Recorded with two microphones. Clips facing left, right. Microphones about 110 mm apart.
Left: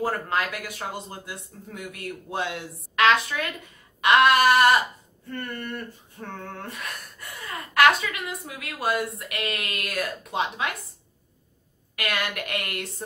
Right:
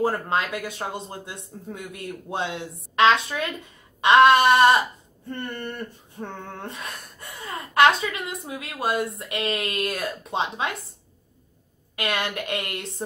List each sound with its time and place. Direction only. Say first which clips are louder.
0.0 s speech: right 2 dB; 25° right (ahead or behind)
11.9 s speech: right 2 dB; 25° right (ahead or behind)